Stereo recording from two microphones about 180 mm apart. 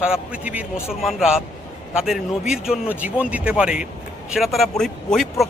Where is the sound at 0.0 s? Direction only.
5° right (ahead or behind).